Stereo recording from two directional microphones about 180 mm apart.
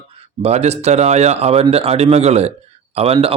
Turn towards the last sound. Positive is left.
turn(degrees=-30)  # may be behind; listen again after turning